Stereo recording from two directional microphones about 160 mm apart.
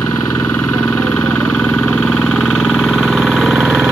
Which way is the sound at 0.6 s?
10° left (ahead or behind).